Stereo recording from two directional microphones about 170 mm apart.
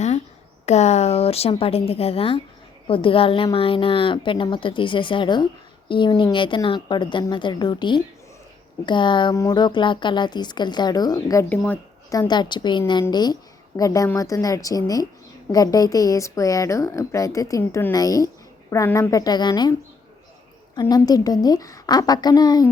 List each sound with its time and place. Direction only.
0.6 s a woman's voice: 40° left (ahead or behind); by 11.8 s 10° left (ahead or behind)
12.1 s a woman's voice: 25° left (ahead or behind)
20.7 s a woman's voice: 20° left (ahead or behind)